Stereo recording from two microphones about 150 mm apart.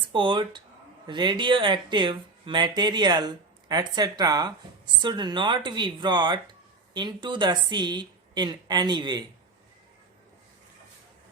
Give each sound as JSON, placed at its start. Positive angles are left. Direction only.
{"t": 0.1, "sound": "speech", "side_deg": -35}